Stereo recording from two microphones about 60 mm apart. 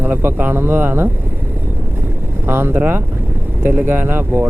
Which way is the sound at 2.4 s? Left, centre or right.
Right.